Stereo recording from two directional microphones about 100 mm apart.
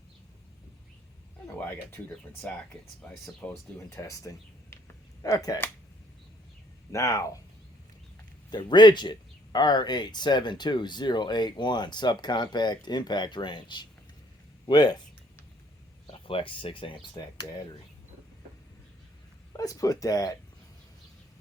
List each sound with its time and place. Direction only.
1.6 s speech: 20° left (ahead or behind)
3.8 s speech: 30° left (ahead or behind)
6.9 s speech: 35° left (ahead or behind)
8.4 s speech: 45° left (ahead or behind)
16.0 s speech: 65° left (ahead or behind)
19.5 s speech: 35° left (ahead or behind)